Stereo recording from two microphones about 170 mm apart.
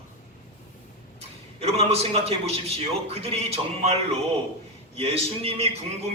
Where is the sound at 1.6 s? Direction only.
35° right (ahead or behind).